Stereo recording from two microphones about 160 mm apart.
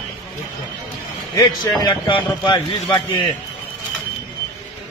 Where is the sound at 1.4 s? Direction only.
25° left (ahead or behind).